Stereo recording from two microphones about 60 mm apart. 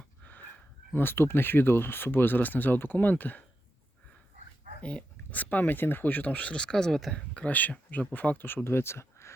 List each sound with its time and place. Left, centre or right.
0.2 s a sound: left
0.9 s speech: left
4.8 s speech: centre; by 9.3 s left